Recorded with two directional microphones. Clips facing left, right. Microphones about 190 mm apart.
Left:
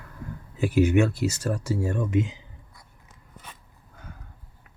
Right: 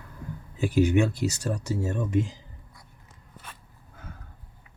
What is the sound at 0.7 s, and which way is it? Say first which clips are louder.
Speech: left 1 dB; 35° right (ahead or behind).